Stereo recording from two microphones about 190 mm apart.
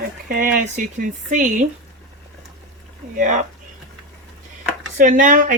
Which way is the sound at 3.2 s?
40° right (ahead or behind).